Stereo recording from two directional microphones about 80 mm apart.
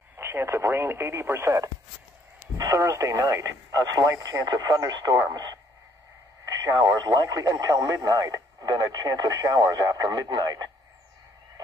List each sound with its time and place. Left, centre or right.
0.2 s speech: right